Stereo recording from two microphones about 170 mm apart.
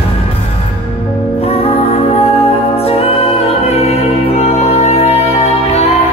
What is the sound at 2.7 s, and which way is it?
Music, 35° left (ahead or behind).